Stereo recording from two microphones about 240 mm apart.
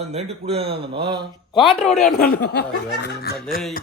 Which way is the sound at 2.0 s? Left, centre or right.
Left.